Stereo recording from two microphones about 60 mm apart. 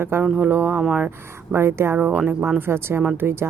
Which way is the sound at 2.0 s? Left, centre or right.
Right.